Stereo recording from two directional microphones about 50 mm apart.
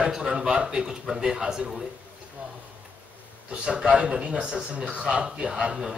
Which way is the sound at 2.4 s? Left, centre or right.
Right.